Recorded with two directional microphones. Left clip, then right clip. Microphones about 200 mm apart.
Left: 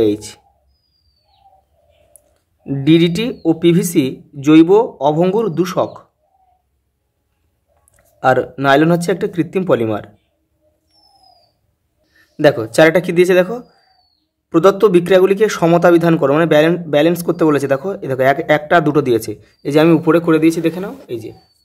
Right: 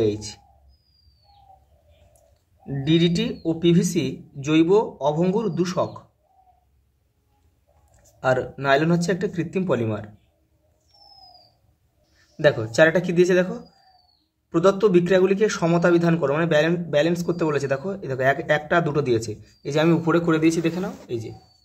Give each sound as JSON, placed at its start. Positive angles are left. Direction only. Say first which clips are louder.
{"t": 0.0, "sound": "a man's voice", "louder": "left 8 dB", "side_deg": 35}
{"t": 2.6, "sound": "a man's voice", "louder": "left 9 dB", "side_deg": 40}
{"t": 7.9, "sound": "a man's voice", "louder": "left 8 dB", "side_deg": 35}
{"t": 12.4, "sound": "a man's voice", "louder": "left 6 dB", "side_deg": 35}